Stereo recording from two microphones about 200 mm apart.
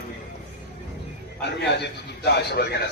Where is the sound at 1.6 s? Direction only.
55° left (ahead or behind).